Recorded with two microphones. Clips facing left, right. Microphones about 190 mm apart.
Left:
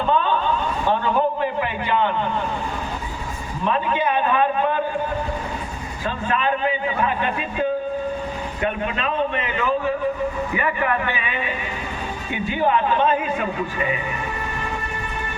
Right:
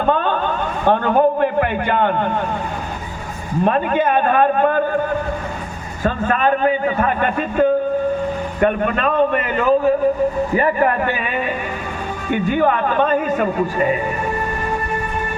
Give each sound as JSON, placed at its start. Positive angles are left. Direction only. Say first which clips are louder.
{"t": 0.0, "sound": "a sound", "louder": "right 2 dB", "side_deg": -50}
{"t": 3.6, "sound": "a man's voice", "louder": "right 5 dB", "side_deg": -50}
{"t": 6.0, "sound": "a man's voice", "louder": "right 6 dB", "side_deg": -50}